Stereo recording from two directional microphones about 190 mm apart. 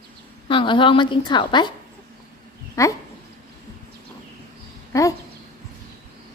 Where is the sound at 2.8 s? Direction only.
15° left (ahead or behind).